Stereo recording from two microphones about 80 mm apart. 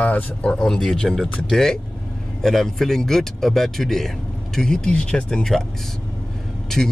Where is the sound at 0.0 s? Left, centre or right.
Centre.